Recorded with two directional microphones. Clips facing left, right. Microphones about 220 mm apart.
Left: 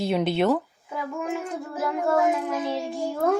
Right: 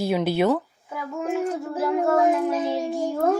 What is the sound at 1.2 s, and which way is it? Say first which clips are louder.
Child singing: right 8 dB; 30° right (ahead or behind).